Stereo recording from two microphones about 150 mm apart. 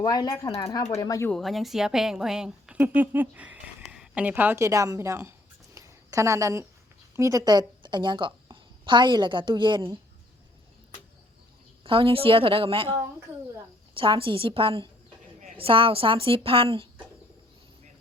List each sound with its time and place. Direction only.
0.0 s speech: 30° left (ahead or behind)
1.3 s a woman's voice: centre (ahead or behind); by 5.3 s 20° right (ahead or behind)
5.7 s a sound: 20° right (ahead or behind)
7.2 s a woman's voice: 20° right (ahead or behind)
11.8 s a woman's voice: 35° right (ahead or behind)